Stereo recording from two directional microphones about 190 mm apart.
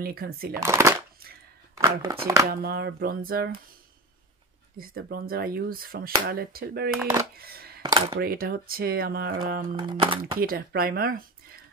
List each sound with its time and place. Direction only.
0.0 s speech: 55° right (ahead or behind)
0.6 s speech: 15° right (ahead or behind)
2.6 s speech: 55° right (ahead or behind)
4.7 s speech: 50° right (ahead or behind)
7.8 s a sound: 20° right (ahead or behind)
8.2 s speech: 50° right (ahead or behind)
9.8 s speech: 25° right (ahead or behind)
10.4 s speech: 50° right (ahead or behind)